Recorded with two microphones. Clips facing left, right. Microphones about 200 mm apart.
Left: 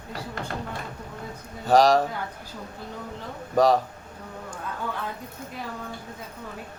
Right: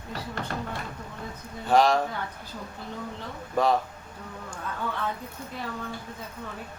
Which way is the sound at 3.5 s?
40° left (ahead or behind).